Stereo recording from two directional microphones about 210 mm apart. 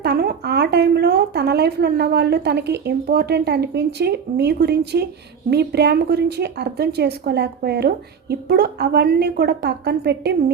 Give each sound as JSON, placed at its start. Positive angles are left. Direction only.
{"t": 0.0, "sound": "a woman's voice", "side_deg": -50}